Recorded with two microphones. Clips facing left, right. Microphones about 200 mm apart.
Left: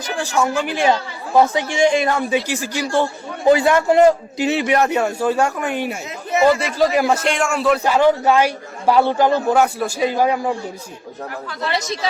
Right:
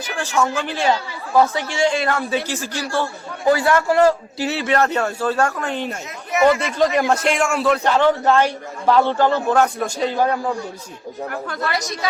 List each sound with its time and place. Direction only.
0.2 s a man's voice: 15° left (ahead or behind)
6.3 s speech: 30° left (ahead or behind)
6.7 s a man's voice: centre (ahead or behind)